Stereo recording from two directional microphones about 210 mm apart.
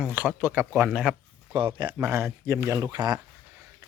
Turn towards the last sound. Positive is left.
turn(degrees=-20)  # may be behind; listen again after turning